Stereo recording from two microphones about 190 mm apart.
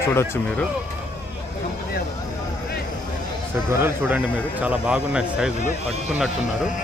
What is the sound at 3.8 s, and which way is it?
Speech, 10° right (ahead or behind).